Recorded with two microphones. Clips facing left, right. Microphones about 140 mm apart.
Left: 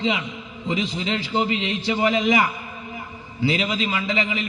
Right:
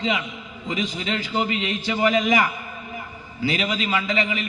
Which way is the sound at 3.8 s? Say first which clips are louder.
Right 1 dB; 30° left (ahead or behind).